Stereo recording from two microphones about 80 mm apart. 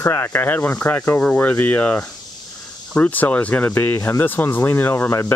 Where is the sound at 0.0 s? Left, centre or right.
Left.